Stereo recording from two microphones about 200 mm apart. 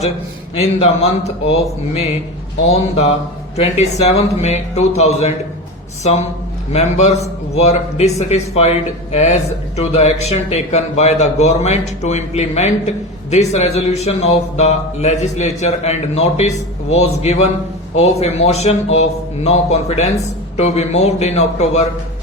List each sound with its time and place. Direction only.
0.8 s a man's voice: 30° left (ahead or behind)
2.6 s a man's voice: 30° left (ahead or behind)